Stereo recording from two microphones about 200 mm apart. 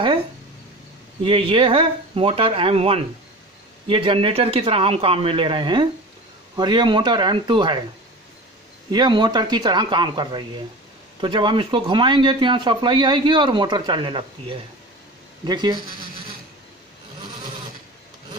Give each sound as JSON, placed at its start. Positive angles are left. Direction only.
{"t": 1.2, "sound": "speech", "side_deg": -25}
{"t": 8.9, "sound": "speech", "side_deg": -20}